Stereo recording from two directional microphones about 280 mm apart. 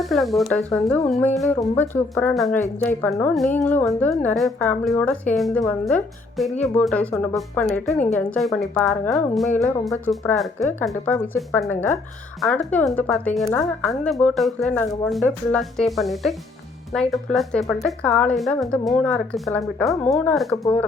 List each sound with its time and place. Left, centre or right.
0.0 s speech: centre